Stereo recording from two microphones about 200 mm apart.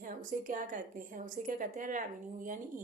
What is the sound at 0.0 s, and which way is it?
A woman's voice, 40° right (ahead or behind).